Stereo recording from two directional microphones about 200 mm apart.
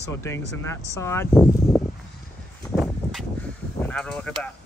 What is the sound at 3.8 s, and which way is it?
Speech, 5° left (ahead or behind).